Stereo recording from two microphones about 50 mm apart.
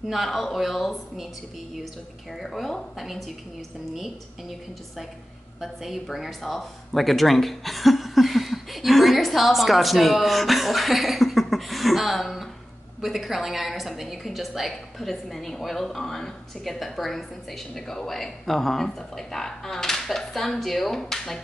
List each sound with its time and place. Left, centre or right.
0.0 s a woman's voice: centre
2.3 s a woman's voice: centre